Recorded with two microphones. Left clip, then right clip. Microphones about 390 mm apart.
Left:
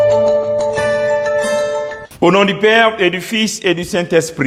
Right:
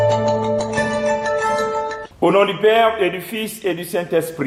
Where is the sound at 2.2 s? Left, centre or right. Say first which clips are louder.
Left 3 dB; left.